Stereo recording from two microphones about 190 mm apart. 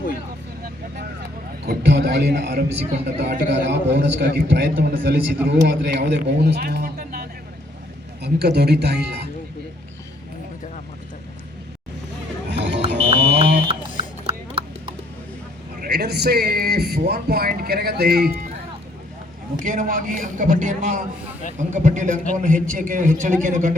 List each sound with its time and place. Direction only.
1.6 s a man's voice: 60° right (ahead or behind)
5.5 s a man's voice: 65° right (ahead or behind)
12.5 s music: 65° right (ahead or behind)
13.1 s a sound: 60° right (ahead or behind)
15.8 s speech: 60° right (ahead or behind)
19.5 s a man's voice: 45° right (ahead or behind)